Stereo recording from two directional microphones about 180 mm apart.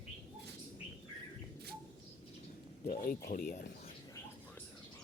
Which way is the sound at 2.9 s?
55° left (ahead or behind).